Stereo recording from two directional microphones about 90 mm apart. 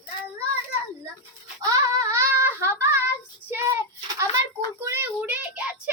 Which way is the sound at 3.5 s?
30° right (ahead or behind).